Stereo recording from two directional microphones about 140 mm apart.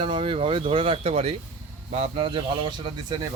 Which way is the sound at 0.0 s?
40° right (ahead or behind).